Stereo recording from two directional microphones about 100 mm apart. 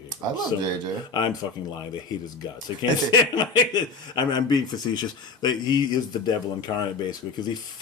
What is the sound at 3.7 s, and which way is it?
Speech, 45° left (ahead or behind).